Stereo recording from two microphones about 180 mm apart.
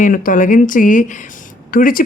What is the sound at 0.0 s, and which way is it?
Speech, 50° left (ahead or behind).